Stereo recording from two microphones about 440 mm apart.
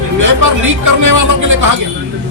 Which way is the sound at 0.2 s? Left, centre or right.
Right.